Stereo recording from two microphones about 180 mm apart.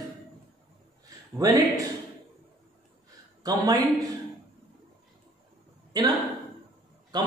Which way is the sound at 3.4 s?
20° right (ahead or behind).